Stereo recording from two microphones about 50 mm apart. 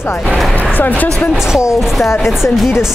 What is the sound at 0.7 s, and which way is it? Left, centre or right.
Speech, left.